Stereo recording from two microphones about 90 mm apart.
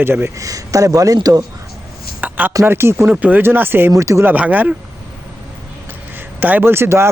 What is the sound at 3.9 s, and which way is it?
Speech, 35° right (ahead or behind).